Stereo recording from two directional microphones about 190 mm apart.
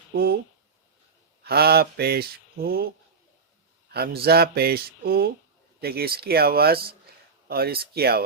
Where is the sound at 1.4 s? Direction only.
55° right (ahead or behind).